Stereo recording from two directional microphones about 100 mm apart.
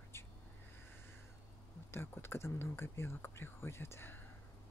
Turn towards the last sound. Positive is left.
turn(degrees=20)  # may be behind; listen again after turning